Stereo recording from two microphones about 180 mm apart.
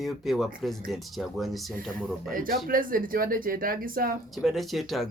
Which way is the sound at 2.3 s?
50° right (ahead or behind).